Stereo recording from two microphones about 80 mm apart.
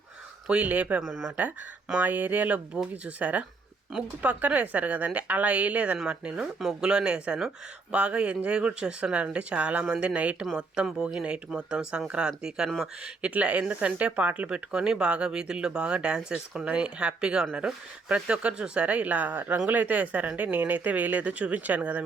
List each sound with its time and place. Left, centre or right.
0.4 s speech: centre
13.2 s speech: centre